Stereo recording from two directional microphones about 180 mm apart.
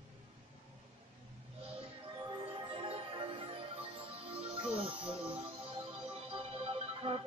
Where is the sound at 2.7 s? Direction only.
30° right (ahead or behind).